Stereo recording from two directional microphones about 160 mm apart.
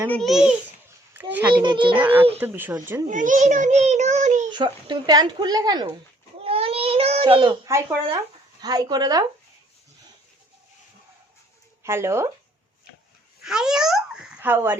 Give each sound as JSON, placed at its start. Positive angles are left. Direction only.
{"t": 0.1, "sound": "a child's voice", "side_deg": 0}
{"t": 1.1, "sound": "a sound", "side_deg": -10}
{"t": 1.6, "sound": "a child's voice", "side_deg": -30}
{"t": 2.0, "sound": "speech", "side_deg": -10}
{"t": 3.1, "sound": "a child's voice", "side_deg": -50}
{"t": 4.4, "sound": "a child's voice", "side_deg": -30}
{"t": 6.4, "sound": "baby cry", "side_deg": -35}
{"t": 7.7, "sound": "a child's voice", "side_deg": -15}
{"t": 11.8, "sound": "speech", "side_deg": -15}
{"t": 13.4, "sound": "a child's voice", "side_deg": -5}